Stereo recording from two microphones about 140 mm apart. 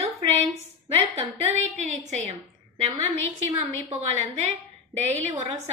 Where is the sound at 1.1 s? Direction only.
50° right (ahead or behind).